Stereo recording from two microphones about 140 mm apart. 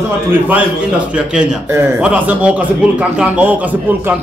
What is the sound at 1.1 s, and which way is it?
A man's voice, 5° right (ahead or behind).